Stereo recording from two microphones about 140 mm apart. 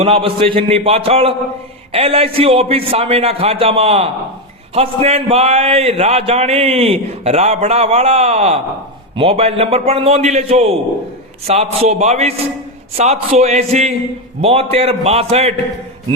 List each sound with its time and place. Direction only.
0.0 s a man's voice: 45° right (ahead or behind)